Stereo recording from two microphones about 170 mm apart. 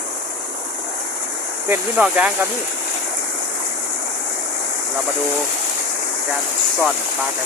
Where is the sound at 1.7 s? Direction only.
10° right (ahead or behind).